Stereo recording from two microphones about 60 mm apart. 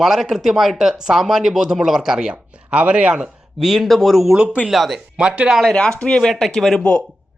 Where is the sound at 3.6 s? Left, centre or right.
Centre.